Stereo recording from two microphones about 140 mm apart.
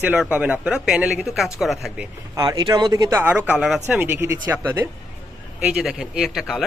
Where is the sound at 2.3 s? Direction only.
25° right (ahead or behind).